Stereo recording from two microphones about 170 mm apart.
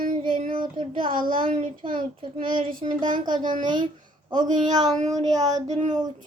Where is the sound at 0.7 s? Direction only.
30° right (ahead or behind).